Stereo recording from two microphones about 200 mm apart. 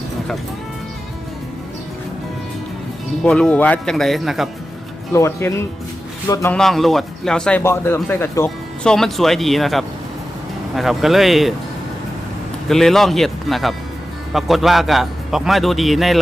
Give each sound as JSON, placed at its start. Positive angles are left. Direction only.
{"t": 3.2, "sound": "a man's voice", "side_deg": 5}
{"t": 5.1, "sound": "speech", "side_deg": 15}
{"t": 6.5, "sound": "a man's voice", "side_deg": 0}
{"t": 12.6, "sound": "a man's voice", "side_deg": 0}